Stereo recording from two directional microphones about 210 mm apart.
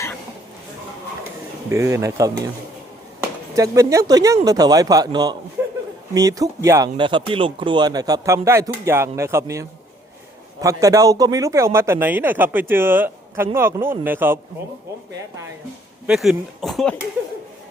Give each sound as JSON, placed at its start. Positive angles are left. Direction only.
{"t": 1.7, "sound": "speech", "side_deg": -15}
{"t": 3.5, "sound": "speech", "side_deg": -15}
{"t": 5.6, "sound": "chuckle", "side_deg": -10}
{"t": 6.1, "sound": "speech", "side_deg": -15}
{"t": 16.0, "sound": "speech", "side_deg": -5}